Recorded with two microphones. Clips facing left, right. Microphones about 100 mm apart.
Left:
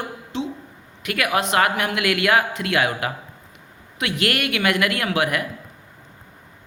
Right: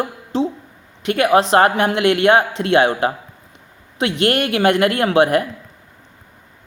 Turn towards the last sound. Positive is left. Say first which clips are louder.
# right 8 dB
turn(degrees=-30)  # may be behind; listen again after turning